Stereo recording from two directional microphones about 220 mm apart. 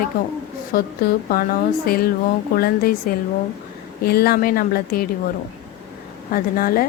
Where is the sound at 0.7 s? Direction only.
45° left (ahead or behind).